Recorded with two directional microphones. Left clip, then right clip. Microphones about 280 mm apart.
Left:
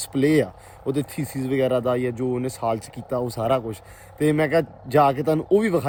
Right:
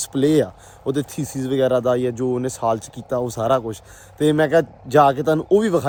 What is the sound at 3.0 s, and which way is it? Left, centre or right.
Speech, right.